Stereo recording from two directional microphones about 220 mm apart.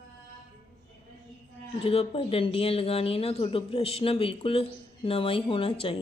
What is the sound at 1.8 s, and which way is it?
Speech, 25° left (ahead or behind).